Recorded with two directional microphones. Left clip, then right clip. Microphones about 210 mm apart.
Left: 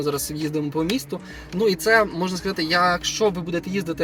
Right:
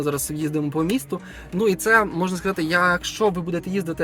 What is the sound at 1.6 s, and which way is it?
Speech, 55° right (ahead or behind).